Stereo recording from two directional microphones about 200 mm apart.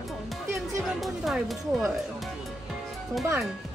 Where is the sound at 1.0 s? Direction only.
Centre (ahead or behind).